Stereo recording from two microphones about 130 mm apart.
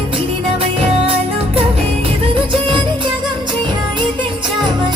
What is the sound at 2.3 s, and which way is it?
Music, 40° right (ahead or behind).